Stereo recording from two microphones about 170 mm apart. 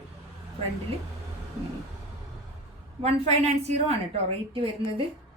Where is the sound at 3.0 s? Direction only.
35° right (ahead or behind).